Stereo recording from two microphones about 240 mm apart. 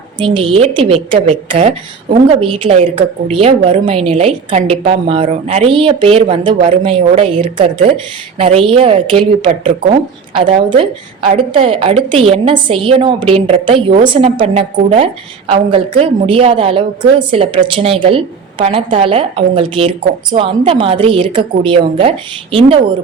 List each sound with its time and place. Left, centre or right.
0.2 s a woman's voice: right